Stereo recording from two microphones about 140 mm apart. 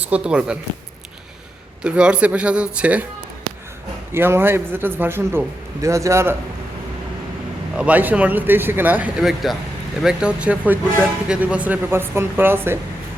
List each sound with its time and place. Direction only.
0.0 s a man's voice: 10° right (ahead or behind)
1.8 s a man's voice: 5° right (ahead or behind)
4.1 s a man's voice: 15° right (ahead or behind)
7.8 s a man's voice: 10° right (ahead or behind)